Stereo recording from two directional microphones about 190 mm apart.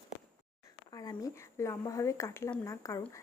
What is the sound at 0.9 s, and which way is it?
Speech, 20° left (ahead or behind).